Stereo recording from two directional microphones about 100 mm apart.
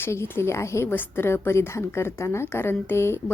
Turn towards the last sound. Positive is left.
turn(degrees=25)  # may be behind; listen again after turning